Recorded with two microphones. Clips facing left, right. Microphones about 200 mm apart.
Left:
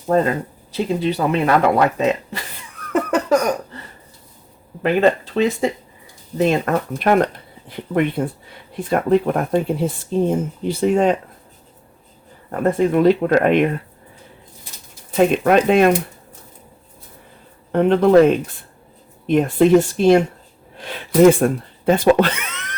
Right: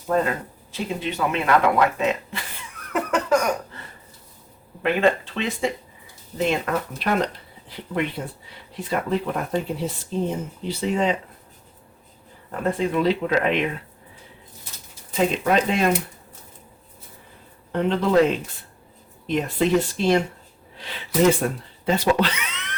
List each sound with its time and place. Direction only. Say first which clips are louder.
0.1 s speech: left 5 dB; 35° left (ahead or behind)
4.8 s speech: left 4 dB; 40° left (ahead or behind)
12.5 s speech: left 6 dB; 50° left (ahead or behind)
15.1 s speech: left 6 dB; 60° left (ahead or behind)
17.7 s speech: left 8 dB; 55° left (ahead or behind)